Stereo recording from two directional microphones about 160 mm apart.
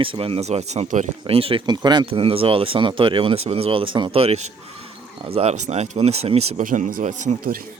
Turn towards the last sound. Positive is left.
turn(degrees=-55)  # may be behind; listen again after turning